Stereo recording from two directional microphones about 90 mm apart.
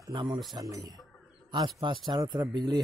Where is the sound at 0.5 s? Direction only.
45° right (ahead or behind).